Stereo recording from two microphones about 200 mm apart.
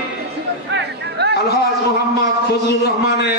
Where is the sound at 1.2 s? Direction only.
55° right (ahead or behind).